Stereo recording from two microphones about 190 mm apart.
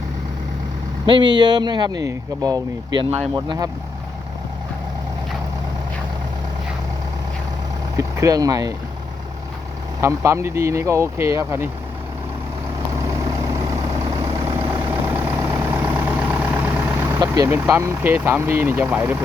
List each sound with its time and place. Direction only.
1.0 s speech: 25° right (ahead or behind)
7.9 s speech: 15° right (ahead or behind)
10.0 s speech: 15° right (ahead or behind)
13.0 s vehicle: 15° right (ahead or behind)